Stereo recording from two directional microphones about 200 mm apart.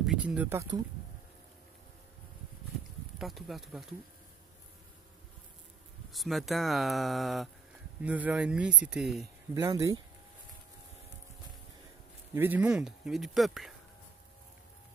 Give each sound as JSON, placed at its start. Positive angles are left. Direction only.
{"t": 0.0, "sound": "a sound", "side_deg": 0}
{"t": 0.5, "sound": "speech", "side_deg": -15}
{"t": 3.2, "sound": "speech", "side_deg": 0}
{"t": 6.1, "sound": "speech", "side_deg": 0}
{"t": 9.5, "sound": "speech", "side_deg": -15}
{"t": 12.4, "sound": "speech", "side_deg": -10}